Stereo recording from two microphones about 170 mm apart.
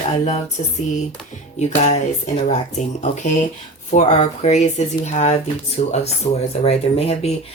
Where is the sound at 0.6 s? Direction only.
40° left (ahead or behind).